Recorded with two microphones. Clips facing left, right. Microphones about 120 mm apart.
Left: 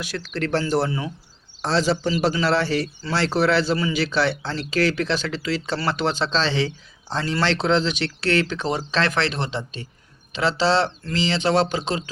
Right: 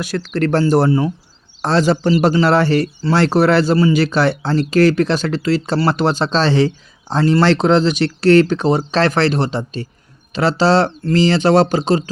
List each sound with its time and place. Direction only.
0.0 s speech: 45° right (ahead or behind)
1.6 s speech: 55° right (ahead or behind)